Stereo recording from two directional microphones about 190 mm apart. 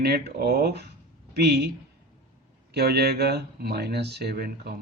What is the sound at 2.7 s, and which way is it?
Speech, 60° right (ahead or behind).